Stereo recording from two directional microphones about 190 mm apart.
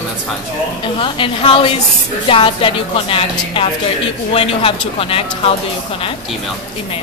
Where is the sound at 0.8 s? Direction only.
25° left (ahead or behind).